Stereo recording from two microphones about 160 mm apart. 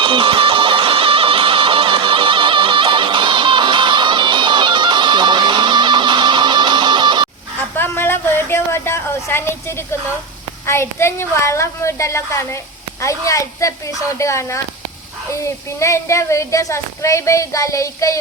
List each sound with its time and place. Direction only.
0.0 s music: 30° right (ahead or behind)
7.8 s a sound: 15° left (ahead or behind)
10.7 s a woman's voice: 15° left (ahead or behind)